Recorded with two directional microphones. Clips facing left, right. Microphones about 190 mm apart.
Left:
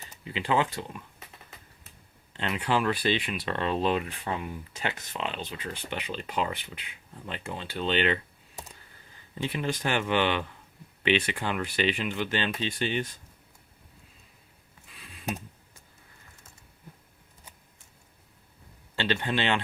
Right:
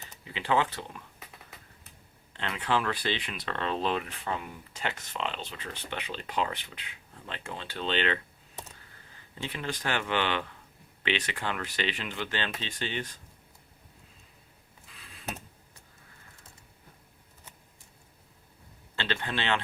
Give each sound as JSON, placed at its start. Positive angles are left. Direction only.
{"t": 0.0, "sound": "speech", "side_deg": 10}
{"t": 2.4, "sound": "speech", "side_deg": 10}
{"t": 19.2, "sound": "speech", "side_deg": 15}